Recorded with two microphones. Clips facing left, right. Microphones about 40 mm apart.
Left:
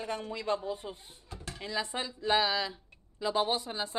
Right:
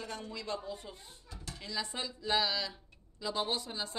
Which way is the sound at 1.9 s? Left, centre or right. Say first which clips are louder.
Left 4 dB; left.